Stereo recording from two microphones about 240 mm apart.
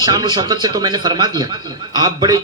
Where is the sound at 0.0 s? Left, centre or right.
Centre.